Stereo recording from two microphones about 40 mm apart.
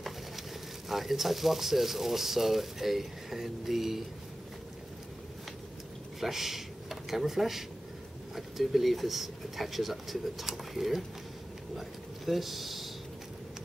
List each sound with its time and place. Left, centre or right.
0.8 s speech: centre
6.2 s speech: centre
12.3 s speech: centre